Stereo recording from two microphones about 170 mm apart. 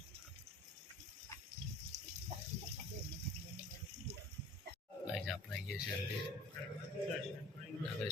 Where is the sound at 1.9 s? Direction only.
40° right (ahead or behind).